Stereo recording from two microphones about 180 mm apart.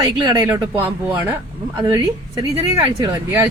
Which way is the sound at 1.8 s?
20° right (ahead or behind).